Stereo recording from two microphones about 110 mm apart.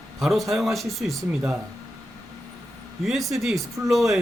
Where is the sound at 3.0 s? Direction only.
Centre (ahead or behind).